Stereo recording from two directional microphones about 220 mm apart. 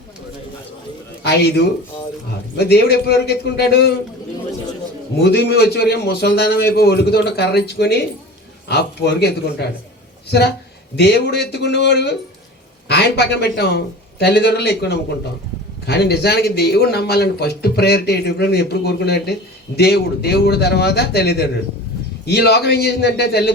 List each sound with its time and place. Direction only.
1.2 s a man's voice: 50° left (ahead or behind)
5.2 s a man's voice: 45° left (ahead or behind)
10.9 s a man's voice: 50° left (ahead or behind)